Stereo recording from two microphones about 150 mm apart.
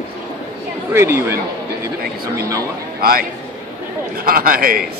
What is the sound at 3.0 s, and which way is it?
A man's voice, 80° right.